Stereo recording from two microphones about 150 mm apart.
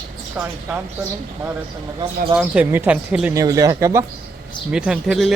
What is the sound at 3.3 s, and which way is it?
Speech, 20° right (ahead or behind).